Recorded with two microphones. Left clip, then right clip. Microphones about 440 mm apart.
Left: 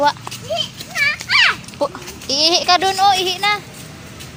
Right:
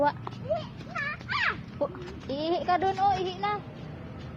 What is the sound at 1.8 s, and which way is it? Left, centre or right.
Speech, right.